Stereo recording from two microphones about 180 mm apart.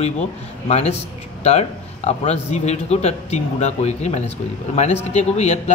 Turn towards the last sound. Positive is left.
turn(degrees=40)  # may be behind; listen again after turning